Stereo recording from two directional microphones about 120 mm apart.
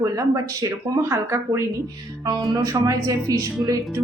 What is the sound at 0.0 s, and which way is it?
Speech, 25° right (ahead or behind).